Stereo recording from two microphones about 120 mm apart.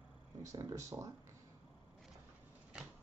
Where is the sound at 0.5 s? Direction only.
25° right (ahead or behind).